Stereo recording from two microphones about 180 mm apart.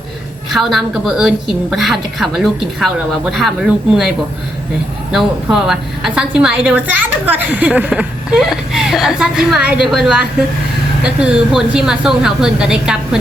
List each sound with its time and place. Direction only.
0.5 s a woman's voice: centre (ahead or behind)
5.1 s a woman's voice: centre (ahead or behind)